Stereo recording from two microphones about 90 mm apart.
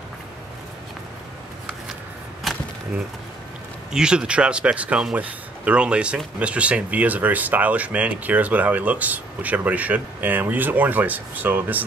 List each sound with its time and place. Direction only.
3.9 s speech: 10° right (ahead or behind)